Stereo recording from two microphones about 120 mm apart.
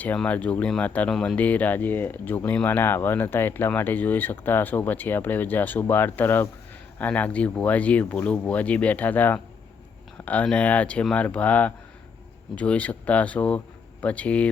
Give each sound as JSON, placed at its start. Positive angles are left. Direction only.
{"t": 0.2, "sound": "speech", "side_deg": 10}
{"t": 1.4, "sound": "speech", "side_deg": 15}